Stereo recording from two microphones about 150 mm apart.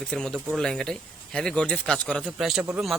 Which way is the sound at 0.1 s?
5° left (ahead or behind).